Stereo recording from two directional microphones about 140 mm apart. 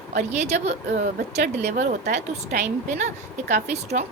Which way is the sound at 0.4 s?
50° right (ahead or behind).